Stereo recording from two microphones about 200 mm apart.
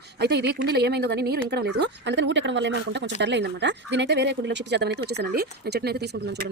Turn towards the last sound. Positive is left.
turn(degrees=-55)  # may be behind; listen again after turning